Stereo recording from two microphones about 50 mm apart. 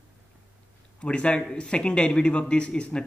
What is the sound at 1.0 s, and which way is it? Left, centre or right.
Speech, left.